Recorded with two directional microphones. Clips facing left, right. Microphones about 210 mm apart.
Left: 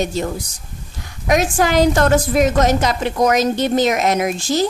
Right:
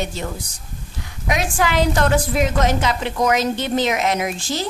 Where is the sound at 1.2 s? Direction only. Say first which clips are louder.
Left 5 dB; 45° left (ahead or behind).